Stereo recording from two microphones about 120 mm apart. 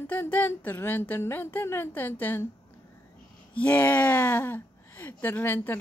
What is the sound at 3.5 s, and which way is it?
Speech, 15° left (ahead or behind).